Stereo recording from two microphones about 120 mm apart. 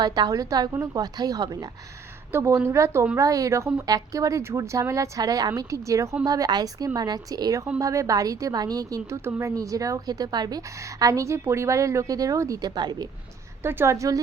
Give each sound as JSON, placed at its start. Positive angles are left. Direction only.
{"t": 0.0, "sound": "a woman's voice", "side_deg": -35}
{"t": 13.6, "sound": "a woman's voice", "side_deg": -20}